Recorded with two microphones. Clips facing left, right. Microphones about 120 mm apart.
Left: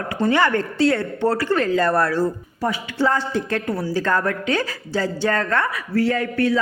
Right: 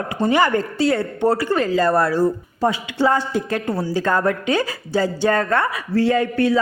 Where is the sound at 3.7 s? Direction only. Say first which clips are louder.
Right 1 dB; 25° right (ahead or behind).